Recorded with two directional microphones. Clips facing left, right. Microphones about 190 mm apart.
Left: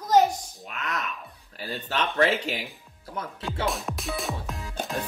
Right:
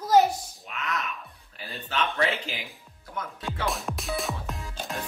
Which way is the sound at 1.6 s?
40° left (ahead or behind).